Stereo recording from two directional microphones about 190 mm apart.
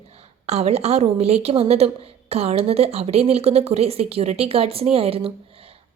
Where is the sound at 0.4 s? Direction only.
35° right (ahead or behind).